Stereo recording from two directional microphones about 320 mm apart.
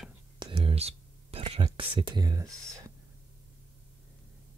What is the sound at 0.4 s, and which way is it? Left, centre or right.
Whispering, centre.